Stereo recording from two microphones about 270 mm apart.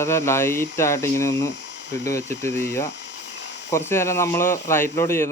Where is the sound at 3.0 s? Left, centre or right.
Left.